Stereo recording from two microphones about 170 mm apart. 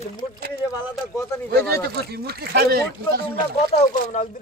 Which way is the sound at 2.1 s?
70° right (ahead or behind).